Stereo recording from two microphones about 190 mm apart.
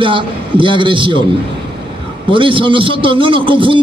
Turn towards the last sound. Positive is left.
turn(degrees=-25)  # may be behind; listen again after turning